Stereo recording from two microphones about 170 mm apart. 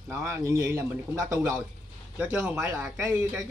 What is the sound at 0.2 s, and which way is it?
Speech, 15° right (ahead or behind).